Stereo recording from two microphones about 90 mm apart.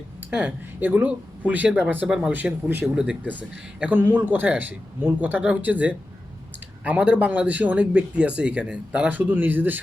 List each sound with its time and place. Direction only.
0.3 s a man's voice: 15° right (ahead or behind)
2.0 s speech: 5° right (ahead or behind)
2.3 s a man's voice: 20° right (ahead or behind)
2.8 s a man's voice: 10° right (ahead or behind)